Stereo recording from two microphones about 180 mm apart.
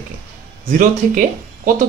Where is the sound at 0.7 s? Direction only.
50° right (ahead or behind).